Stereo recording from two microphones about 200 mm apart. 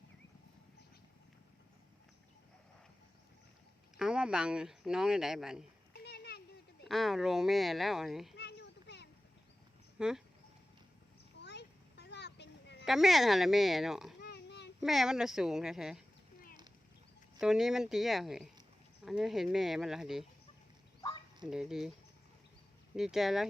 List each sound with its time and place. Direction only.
3.9 s speech: 5° right (ahead or behind)
5.9 s a sound: 55° left (ahead or behind)
6.8 s speech: centre (ahead or behind)
8.4 s children playing: 55° left (ahead or behind)
10.0 s speech: 5° right (ahead or behind)
11.3 s a sound: 60° left (ahead or behind)
12.8 s speech: centre (ahead or behind)
14.2 s children playing: 55° left (ahead or behind)
14.8 s speech: centre (ahead or behind)
17.4 s speech: 5° right (ahead or behind)
21.4 s speech: 5° right (ahead or behind)
23.0 s speech: centre (ahead or behind)